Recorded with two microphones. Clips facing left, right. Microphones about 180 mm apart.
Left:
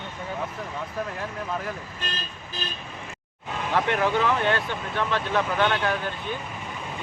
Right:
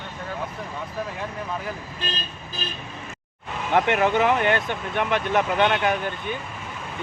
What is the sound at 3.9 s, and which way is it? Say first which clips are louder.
Speech: right 2 dB; 20° right (ahead or behind).